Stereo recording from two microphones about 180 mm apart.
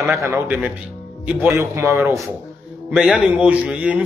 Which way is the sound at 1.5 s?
15° right (ahead or behind).